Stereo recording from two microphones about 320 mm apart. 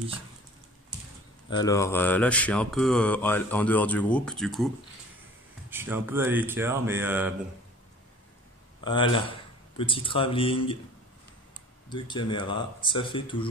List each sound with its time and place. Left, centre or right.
1.5 s mantra: centre
5.7 s speech: centre
8.8 s speech: centre
11.9 s speech: centre